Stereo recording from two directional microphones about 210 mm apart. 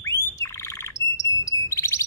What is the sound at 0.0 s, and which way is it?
Bird, 15° left (ahead or behind).